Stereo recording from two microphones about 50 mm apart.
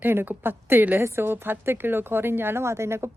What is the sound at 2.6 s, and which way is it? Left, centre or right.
Speech, right.